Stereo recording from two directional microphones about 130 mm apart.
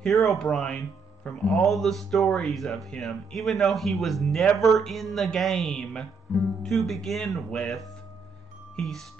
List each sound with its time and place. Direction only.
0.0 s speech: centre (ahead or behind)